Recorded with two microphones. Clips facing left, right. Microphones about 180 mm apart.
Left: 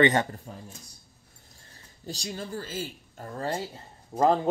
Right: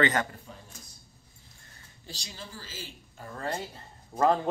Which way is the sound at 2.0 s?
45° left (ahead or behind).